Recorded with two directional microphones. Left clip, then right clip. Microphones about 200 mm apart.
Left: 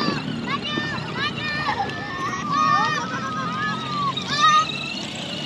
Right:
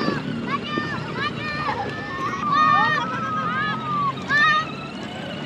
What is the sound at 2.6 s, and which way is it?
Vehicle, 50° left (ahead or behind).